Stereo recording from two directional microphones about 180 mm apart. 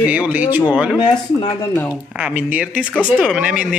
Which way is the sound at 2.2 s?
5° right (ahead or behind).